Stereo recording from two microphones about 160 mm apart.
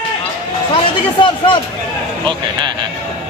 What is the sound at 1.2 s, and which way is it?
Speech, 30° left (ahead or behind).